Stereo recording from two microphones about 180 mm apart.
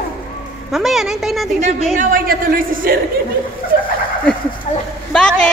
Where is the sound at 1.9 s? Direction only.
50° right (ahead or behind).